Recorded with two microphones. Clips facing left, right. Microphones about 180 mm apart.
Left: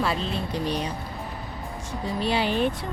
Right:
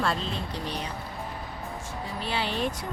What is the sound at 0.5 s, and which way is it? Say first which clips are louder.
Speech: left 6 dB; 15° left (ahead or behind).